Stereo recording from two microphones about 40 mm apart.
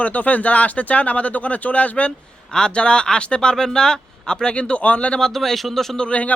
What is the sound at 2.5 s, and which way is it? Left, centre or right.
Speech, left.